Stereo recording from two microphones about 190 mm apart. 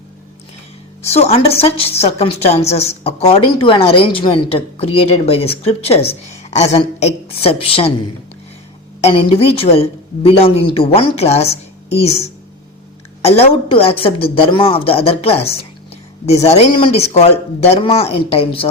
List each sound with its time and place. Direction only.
1.0 s a woman's voice: 35° left (ahead or behind)
13.2 s a woman's voice: 30° left (ahead or behind)